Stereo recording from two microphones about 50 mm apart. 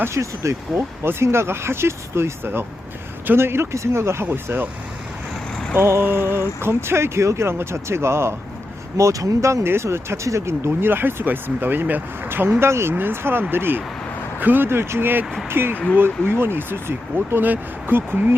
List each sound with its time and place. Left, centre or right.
0.1 s speech: right
1.0 s speech: right
5.8 s speech: right
9.0 s speech: right
9.6 s speech: right
12.9 s speech: right